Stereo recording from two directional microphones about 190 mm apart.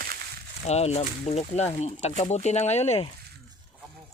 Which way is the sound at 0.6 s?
35° left (ahead or behind).